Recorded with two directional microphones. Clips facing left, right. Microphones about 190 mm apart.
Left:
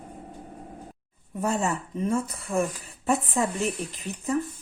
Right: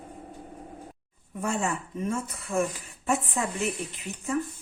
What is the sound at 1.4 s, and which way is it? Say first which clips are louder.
Speech: left 3 dB; 35° left (ahead or behind).